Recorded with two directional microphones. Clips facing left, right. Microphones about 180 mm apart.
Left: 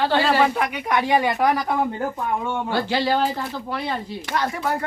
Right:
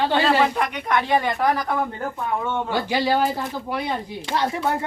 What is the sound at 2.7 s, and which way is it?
Speech, 15° right (ahead or behind).